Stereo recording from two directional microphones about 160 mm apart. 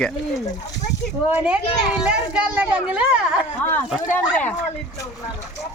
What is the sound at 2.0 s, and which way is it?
A child's voice, 5° right (ahead or behind).